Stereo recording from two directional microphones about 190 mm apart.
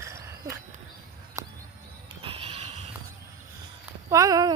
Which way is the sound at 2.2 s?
30° right (ahead or behind).